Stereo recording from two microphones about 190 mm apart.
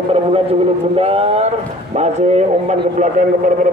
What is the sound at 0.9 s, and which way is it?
A man's voice, 30° right (ahead or behind).